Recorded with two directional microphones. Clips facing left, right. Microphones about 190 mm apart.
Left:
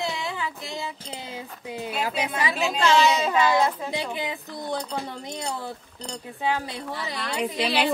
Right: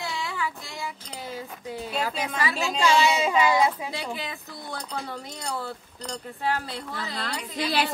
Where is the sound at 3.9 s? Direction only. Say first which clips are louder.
Left 4 dB; 20° left (ahead or behind).